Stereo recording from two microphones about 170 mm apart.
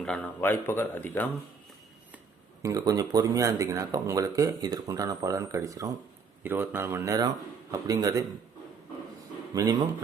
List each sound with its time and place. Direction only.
0.0 s a man's voice: 5° left (ahead or behind)
2.6 s speech: 20° right (ahead or behind)
9.6 s speech: 20° right (ahead or behind)